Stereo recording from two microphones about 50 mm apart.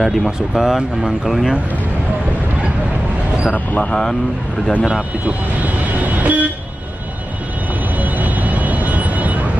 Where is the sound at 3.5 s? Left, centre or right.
Left.